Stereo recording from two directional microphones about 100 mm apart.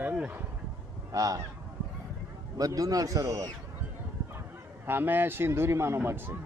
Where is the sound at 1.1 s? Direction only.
35° right (ahead or behind).